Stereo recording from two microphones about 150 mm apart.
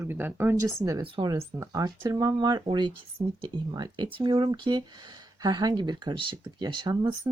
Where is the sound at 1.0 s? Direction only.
35° right (ahead or behind).